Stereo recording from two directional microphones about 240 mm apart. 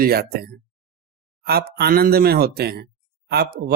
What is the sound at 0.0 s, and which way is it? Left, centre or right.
Speech, right.